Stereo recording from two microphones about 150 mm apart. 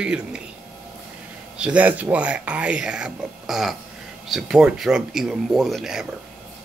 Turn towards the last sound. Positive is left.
turn(degrees=-5)  # may be behind; listen again after turning